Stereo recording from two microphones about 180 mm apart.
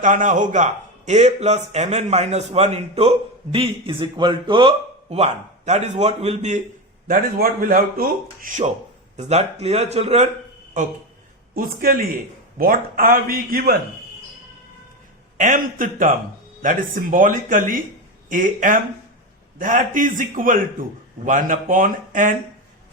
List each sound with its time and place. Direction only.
0.0 s a man's voice: 45° right (ahead or behind)
7.1 s speech: 55° right (ahead or behind)
9.1 s a man's voice: 35° right (ahead or behind)
11.5 s speech: 55° right (ahead or behind)
15.4 s speech: 45° right (ahead or behind)